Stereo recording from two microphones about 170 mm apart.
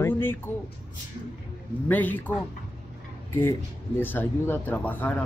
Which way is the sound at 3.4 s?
15° left (ahead or behind).